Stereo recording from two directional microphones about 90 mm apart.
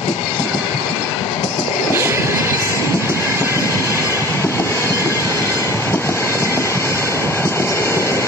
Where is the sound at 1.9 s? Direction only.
25° right (ahead or behind).